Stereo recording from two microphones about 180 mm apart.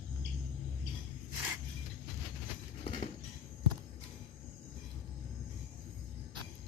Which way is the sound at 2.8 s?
35° left (ahead or behind).